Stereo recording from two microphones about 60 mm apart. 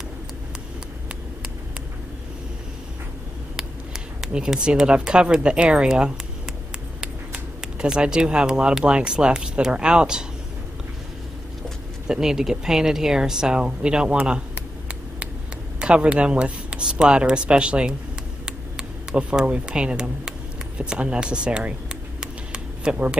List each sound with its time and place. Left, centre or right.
3.5 s speech: centre
7.6 s speech: centre
12.1 s speech: centre
15.8 s speech: centre
22.2 s a sound: centre